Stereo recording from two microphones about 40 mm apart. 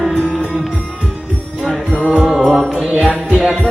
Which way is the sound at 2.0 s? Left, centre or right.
Right.